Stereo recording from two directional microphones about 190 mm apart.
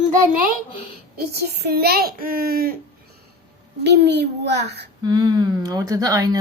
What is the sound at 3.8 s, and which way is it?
A child's voice, 60° right (ahead or behind).